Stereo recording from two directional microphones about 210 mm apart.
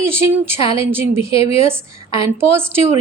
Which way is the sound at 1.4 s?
30° left (ahead or behind).